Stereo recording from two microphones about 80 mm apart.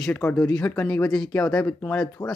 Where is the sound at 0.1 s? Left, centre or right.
Centre.